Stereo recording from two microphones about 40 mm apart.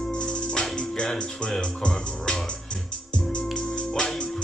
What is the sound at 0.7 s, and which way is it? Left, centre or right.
Speech, left.